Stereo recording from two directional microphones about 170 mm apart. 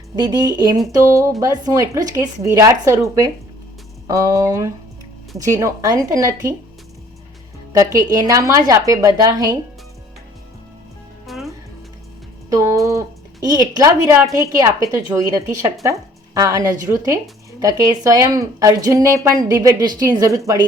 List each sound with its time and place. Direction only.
0.2 s speech: 25° right (ahead or behind)
7.7 s speech: 20° right (ahead or behind)
11.3 s music: centre (ahead or behind)
12.5 s a woman's voice: 20° right (ahead or behind)